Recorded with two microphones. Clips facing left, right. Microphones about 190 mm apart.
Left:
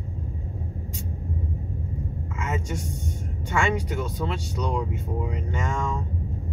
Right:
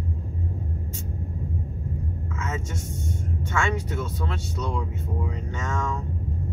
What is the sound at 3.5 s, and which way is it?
Speech, 15° left (ahead or behind).